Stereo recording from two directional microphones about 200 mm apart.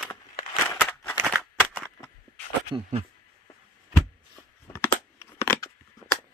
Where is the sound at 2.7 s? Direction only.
30° right (ahead or behind).